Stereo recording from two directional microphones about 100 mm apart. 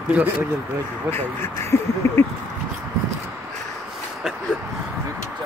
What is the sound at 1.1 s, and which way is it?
Speech, 25° left (ahead or behind).